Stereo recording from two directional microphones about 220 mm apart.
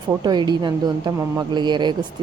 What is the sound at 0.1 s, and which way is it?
A woman's voice, 20° right (ahead or behind).